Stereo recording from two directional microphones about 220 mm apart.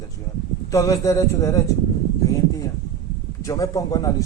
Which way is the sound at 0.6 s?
15° left (ahead or behind).